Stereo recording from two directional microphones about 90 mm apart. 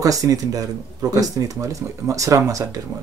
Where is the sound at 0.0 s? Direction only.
40° right (ahead or behind).